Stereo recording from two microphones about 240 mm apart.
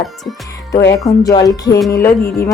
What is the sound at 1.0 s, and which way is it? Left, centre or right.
Speech, centre.